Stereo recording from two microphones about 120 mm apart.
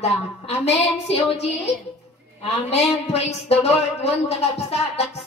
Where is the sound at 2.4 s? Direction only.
60° left (ahead or behind).